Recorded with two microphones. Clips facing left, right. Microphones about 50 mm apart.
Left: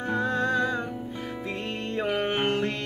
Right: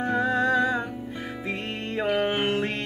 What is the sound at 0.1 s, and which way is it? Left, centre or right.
Music, right.